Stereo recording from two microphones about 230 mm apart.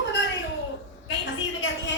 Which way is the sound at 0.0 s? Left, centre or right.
Left.